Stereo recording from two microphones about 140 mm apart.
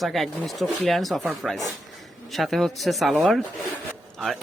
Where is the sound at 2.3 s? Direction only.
Centre (ahead or behind).